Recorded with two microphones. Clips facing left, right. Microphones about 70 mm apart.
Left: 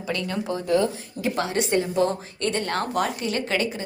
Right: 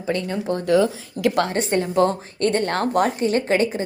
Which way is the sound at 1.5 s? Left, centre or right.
Right.